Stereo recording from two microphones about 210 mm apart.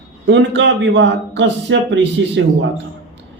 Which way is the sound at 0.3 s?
60° right (ahead or behind).